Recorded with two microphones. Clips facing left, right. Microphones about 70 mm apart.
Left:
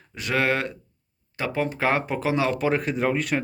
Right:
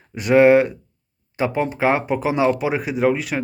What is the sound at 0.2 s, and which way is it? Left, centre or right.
Speech, right.